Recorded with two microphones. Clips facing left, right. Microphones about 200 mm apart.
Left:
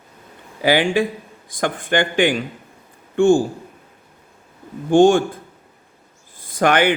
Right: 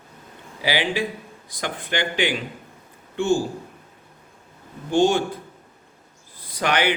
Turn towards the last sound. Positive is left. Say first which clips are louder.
# left 6 dB
turn(degrees=50)  # may be behind; listen again after turning